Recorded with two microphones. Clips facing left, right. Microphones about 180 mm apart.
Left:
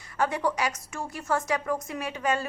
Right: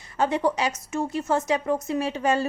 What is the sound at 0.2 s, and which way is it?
Speech, 25° right (ahead or behind).